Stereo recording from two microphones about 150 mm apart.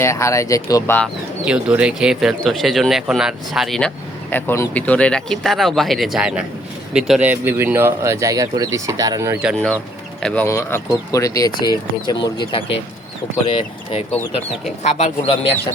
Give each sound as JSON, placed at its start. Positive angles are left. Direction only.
{"t": 0.0, "sound": "speech", "side_deg": 20}
{"t": 1.5, "sound": "speech", "side_deg": -10}
{"t": 10.2, "sound": "speech", "side_deg": 5}
{"t": 10.4, "sound": "speech", "side_deg": 20}
{"t": 14.8, "sound": "a man's voice", "side_deg": 50}